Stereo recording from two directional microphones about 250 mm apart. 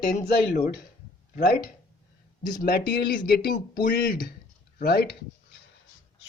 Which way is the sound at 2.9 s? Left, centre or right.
Left.